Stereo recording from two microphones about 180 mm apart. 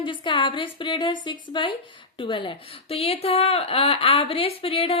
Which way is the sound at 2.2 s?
25° left (ahead or behind).